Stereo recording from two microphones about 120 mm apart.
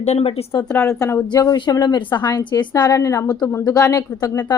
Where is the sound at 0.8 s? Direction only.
25° left (ahead or behind).